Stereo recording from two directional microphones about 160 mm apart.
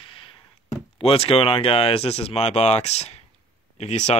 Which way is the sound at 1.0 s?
40° left (ahead or behind).